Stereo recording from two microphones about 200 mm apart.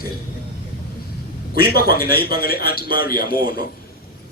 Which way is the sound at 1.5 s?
50° left (ahead or behind).